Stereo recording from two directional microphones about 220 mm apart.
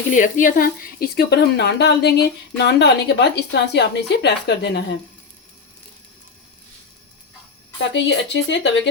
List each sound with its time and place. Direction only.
0.1 s a woman's voice: 35° left (ahead or behind)
7.8 s speech: 55° left (ahead or behind)